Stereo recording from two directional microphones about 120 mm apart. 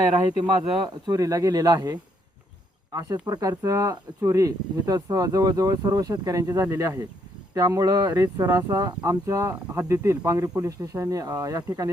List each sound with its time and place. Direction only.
1.0 s speech: 30° right (ahead or behind)